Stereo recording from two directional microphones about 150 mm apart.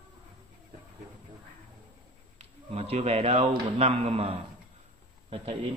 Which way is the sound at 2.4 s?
45° right (ahead or behind).